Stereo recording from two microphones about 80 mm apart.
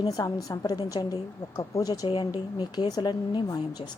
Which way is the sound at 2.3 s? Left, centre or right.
Left.